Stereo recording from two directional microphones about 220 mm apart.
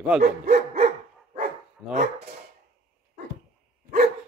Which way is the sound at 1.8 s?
Centre (ahead or behind).